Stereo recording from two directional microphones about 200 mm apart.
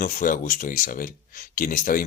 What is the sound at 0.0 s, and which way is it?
Speech, 40° left (ahead or behind).